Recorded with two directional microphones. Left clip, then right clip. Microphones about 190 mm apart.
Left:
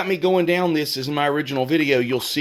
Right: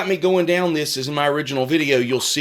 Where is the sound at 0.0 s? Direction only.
30° left (ahead or behind).